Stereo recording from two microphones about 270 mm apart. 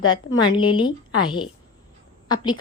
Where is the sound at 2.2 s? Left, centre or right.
Centre.